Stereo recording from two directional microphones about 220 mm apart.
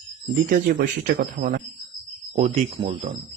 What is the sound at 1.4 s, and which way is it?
Speech, 35° right (ahead or behind).